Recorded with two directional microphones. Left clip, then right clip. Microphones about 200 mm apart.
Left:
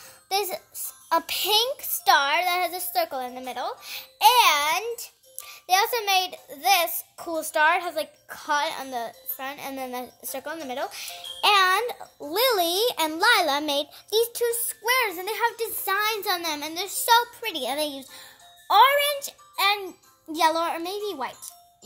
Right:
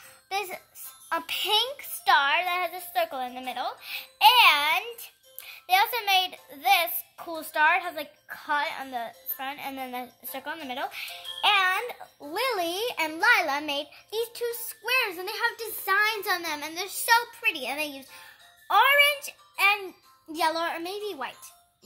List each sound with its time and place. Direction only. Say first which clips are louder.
1.0 s a child's voice: left 4 dB; 45° left (ahead or behind)
20.3 s a child's voice: left 4 dB; 40° left (ahead or behind)